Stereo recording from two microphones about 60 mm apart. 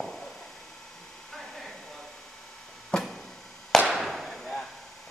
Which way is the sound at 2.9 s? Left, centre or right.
Centre.